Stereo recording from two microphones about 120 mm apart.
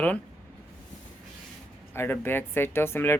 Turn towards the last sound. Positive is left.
turn(degrees=20)  # may be behind; listen again after turning